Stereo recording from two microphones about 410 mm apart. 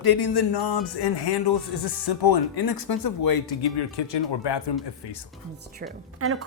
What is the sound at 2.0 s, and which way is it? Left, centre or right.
Speech, left.